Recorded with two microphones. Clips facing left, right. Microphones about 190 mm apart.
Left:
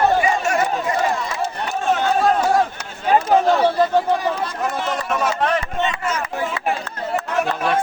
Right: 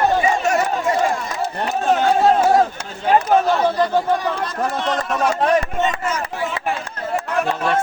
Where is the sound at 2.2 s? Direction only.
25° right (ahead or behind).